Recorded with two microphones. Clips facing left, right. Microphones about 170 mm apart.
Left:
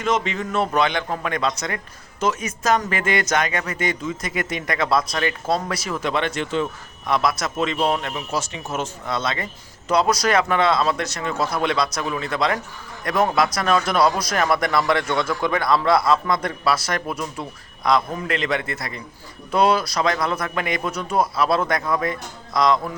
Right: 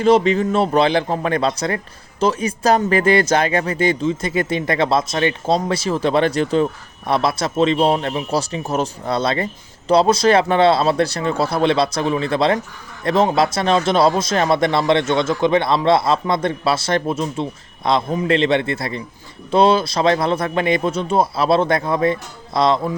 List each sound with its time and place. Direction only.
0.0 s speech: 35° right (ahead or behind)